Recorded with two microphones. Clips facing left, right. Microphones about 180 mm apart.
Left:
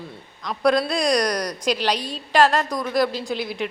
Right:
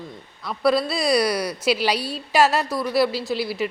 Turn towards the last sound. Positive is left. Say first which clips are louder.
# right 2 dB
turn(degrees=-5)  # may be behind; listen again after turning